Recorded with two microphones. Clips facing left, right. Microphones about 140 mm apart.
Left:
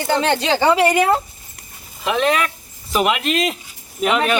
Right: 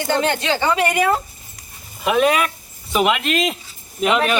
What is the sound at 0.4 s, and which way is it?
Speech, 30° left (ahead or behind).